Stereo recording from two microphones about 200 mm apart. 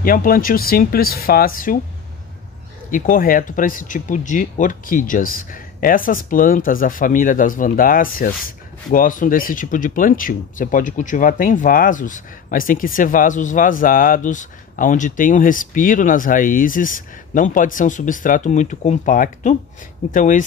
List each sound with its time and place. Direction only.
0.0 s speech: 45° left (ahead or behind)
2.9 s speech: 45° left (ahead or behind)